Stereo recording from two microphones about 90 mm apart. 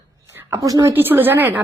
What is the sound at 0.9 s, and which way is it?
Speech, 20° right (ahead or behind).